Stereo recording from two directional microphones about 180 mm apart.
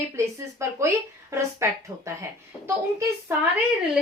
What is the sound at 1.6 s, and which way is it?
Speech, 15° right (ahead or behind).